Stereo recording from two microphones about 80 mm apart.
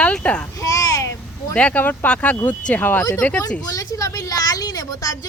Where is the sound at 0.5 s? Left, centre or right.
Left.